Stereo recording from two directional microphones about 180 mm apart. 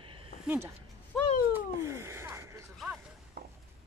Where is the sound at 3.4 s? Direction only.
60° right (ahead or behind).